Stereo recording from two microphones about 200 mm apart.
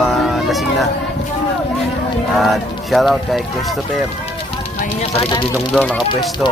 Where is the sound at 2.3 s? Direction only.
Centre (ahead or behind).